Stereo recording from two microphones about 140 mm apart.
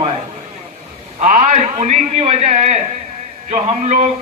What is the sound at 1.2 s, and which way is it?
A man's voice, 60° right (ahead or behind).